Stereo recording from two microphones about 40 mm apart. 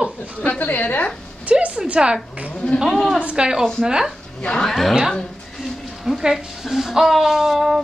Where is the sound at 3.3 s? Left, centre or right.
Right.